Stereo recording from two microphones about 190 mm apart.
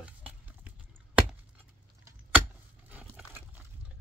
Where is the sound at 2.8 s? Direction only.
10° right (ahead or behind).